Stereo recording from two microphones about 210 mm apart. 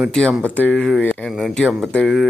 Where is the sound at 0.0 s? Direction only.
5° left (ahead or behind).